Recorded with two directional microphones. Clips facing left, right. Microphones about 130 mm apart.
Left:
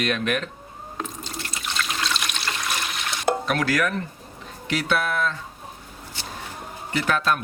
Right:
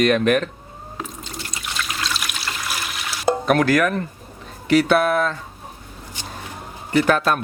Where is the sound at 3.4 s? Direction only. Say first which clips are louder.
Right 6 dB; 50° right (ahead or behind).